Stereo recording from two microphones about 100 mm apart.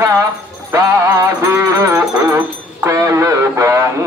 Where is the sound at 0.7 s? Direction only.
30° right (ahead or behind).